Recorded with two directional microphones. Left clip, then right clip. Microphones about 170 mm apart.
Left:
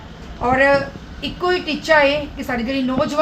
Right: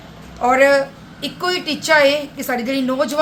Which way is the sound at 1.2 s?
15° right (ahead or behind).